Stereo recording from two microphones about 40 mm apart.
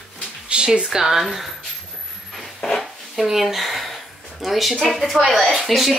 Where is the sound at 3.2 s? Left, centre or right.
Centre.